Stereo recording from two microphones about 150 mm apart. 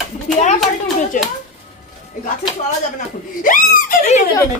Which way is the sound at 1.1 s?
60° left (ahead or behind).